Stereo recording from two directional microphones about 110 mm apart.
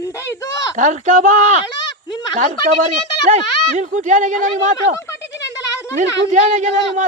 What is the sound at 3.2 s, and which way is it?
Speech, 90° right.